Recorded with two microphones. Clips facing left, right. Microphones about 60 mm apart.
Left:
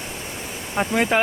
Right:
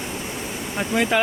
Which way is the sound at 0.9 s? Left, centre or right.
Left.